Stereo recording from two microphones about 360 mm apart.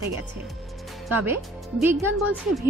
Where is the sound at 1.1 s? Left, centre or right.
Centre.